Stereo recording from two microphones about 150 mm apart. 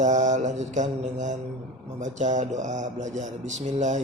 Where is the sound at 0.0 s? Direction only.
55° right (ahead or behind).